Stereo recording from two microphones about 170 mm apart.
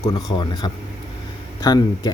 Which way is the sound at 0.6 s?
25° left (ahead or behind).